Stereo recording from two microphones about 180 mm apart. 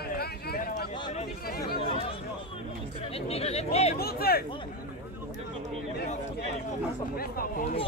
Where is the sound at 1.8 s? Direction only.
30° left (ahead or behind).